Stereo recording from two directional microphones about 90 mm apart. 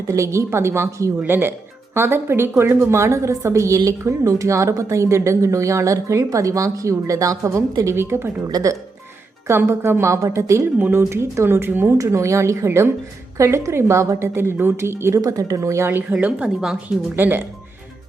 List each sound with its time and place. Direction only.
0.1 s speech: 35° right (ahead or behind)
9.5 s speech: 30° right (ahead or behind)
10.8 s speech: 25° right (ahead or behind)
11.9 s speech: 35° right (ahead or behind)
15.2 s a woman's voice: 40° right (ahead or behind); by 17.1 s 10° right (ahead or behind)
17.2 s speech: 20° right (ahead or behind)